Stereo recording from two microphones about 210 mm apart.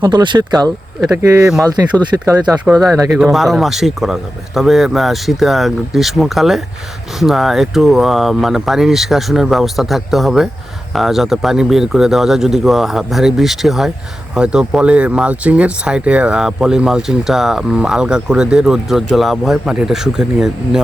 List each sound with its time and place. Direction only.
0.0 s speech: 20° right (ahead or behind)
2.5 s speech: centre (ahead or behind)